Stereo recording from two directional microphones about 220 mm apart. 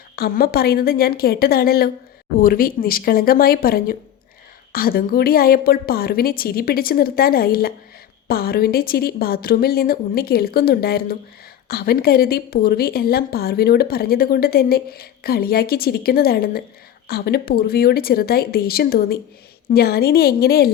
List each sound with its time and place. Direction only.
0.2 s a woman's voice: 45° left (ahead or behind)